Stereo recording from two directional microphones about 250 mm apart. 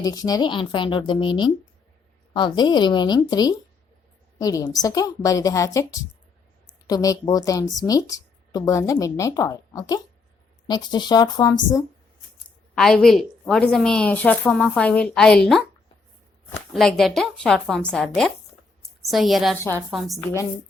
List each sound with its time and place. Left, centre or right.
0.0 s speech: centre
12.7 s a woman's voice: centre
16.7 s a woman's voice: centre